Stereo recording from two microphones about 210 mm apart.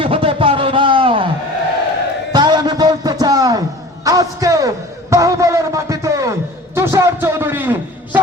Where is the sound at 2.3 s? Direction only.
20° right (ahead or behind).